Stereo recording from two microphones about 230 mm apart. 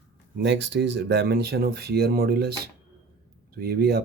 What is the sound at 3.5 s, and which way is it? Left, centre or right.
Speech, right.